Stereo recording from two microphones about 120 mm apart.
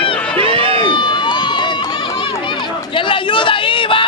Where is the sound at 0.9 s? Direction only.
40° left (ahead or behind).